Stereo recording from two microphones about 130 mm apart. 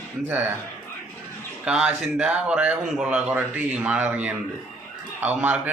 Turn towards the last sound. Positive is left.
turn(degrees=-10)  # may be behind; listen again after turning